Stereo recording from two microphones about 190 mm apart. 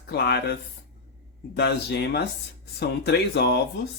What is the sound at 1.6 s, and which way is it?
Speech, 60° left (ahead or behind).